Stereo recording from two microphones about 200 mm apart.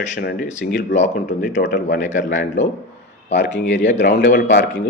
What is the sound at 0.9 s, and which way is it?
A man's voice, 35° left (ahead or behind).